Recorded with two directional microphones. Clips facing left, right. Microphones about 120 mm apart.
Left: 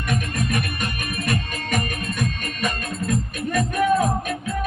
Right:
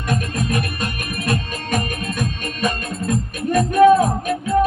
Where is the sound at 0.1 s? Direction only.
35° right (ahead or behind).